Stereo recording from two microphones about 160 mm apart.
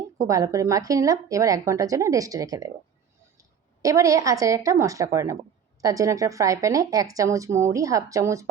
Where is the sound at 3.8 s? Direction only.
20° right (ahead or behind).